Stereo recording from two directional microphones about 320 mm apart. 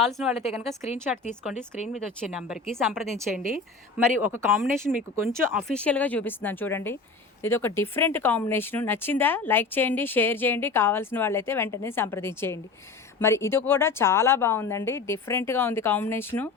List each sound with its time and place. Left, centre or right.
0.0 s speech: centre
4.2 s speech: centre